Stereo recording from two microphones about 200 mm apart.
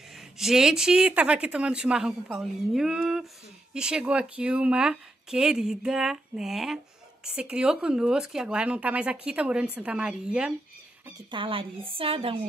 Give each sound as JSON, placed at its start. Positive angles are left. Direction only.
{"t": 0.1, "sound": "speech", "side_deg": 0}
{"t": 11.1, "sound": "speech", "side_deg": -20}